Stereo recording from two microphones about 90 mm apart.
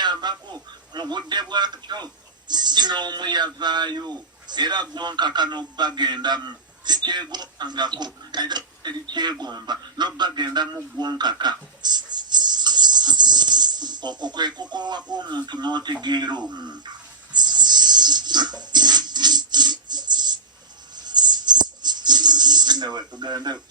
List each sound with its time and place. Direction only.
0.0 s speech: 55° right (ahead or behind)
17.3 s a sound: 55° right (ahead or behind)
23.2 s speech: 55° right (ahead or behind)